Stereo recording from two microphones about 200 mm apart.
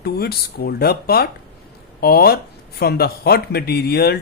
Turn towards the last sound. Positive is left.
turn(degrees=50)  # may be behind; listen again after turning